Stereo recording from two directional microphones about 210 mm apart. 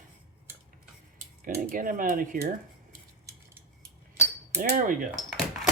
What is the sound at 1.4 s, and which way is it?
Speech, 40° right (ahead or behind).